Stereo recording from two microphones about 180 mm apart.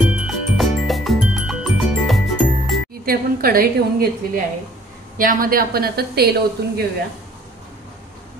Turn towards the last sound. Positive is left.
turn(degrees=-60)  # may be behind; listen again after turning